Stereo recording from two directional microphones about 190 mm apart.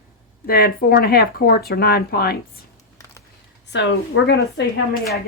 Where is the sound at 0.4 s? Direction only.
50° left (ahead or behind).